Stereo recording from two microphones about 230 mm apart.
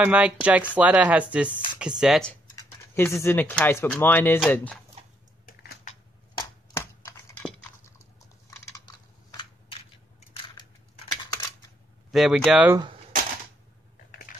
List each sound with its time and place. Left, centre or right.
0.0 s speech: centre
2.5 s speech: centre
5.5 s typing: left
6.3 s a sound: centre
8.5 s coin: centre
10.3 s a sound: centre
12.1 s speech: centre